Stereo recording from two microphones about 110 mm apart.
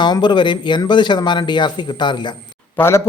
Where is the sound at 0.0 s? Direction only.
45° left (ahead or behind).